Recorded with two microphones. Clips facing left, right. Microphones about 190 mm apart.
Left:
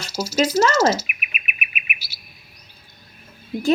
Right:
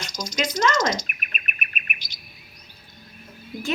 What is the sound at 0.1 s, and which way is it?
Chirp, 5° left (ahead or behind).